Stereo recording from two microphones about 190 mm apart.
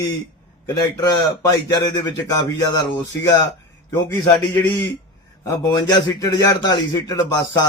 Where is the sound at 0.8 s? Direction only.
20° left (ahead or behind).